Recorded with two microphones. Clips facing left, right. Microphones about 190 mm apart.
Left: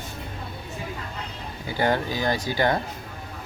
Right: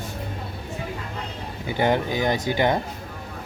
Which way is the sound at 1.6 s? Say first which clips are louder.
Right 2 dB; 20° right (ahead or behind).